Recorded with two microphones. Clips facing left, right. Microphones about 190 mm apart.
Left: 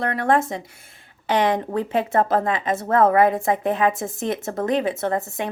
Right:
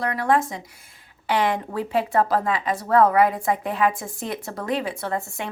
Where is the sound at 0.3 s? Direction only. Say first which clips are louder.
Left 1 dB; 25° left (ahead or behind).